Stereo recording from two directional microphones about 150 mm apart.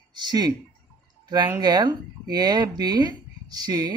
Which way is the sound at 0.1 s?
25° right (ahead or behind).